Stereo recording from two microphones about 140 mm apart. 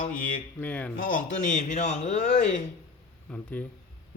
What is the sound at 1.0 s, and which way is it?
A man's voice, 75° left (ahead or behind).